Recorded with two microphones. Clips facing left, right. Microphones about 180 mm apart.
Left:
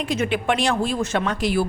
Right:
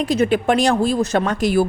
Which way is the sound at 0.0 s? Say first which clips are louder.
Right 6 dB; 40° right (ahead or behind).